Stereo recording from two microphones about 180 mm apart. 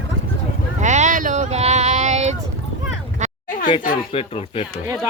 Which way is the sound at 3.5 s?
45° left (ahead or behind).